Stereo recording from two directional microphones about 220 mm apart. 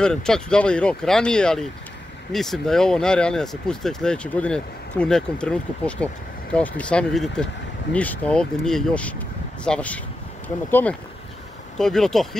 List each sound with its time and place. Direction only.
0.0 s speech: 5° left (ahead or behind)